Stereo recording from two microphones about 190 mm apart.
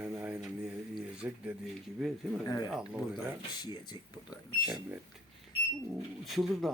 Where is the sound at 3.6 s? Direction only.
25° left (ahead or behind).